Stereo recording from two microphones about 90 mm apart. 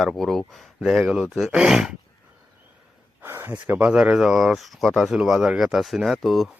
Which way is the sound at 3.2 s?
25° right (ahead or behind).